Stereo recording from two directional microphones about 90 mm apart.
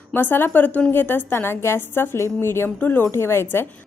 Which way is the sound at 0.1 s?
20° left (ahead or behind).